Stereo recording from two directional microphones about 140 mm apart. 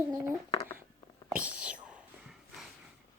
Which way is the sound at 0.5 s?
20° left (ahead or behind).